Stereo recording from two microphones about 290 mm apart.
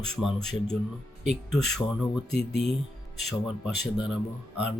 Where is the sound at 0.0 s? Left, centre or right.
Centre.